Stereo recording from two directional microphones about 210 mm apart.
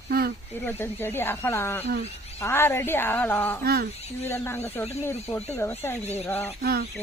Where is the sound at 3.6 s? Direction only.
45° right (ahead or behind).